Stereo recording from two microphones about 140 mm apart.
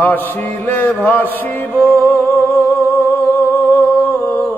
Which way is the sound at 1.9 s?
15° left (ahead or behind).